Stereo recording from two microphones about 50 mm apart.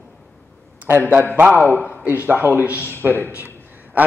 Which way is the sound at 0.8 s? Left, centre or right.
Right.